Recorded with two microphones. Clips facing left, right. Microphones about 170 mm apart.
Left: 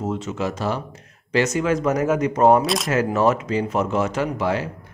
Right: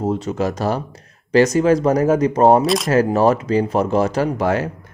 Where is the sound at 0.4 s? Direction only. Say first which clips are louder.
Right 4 dB; 40° right (ahead or behind).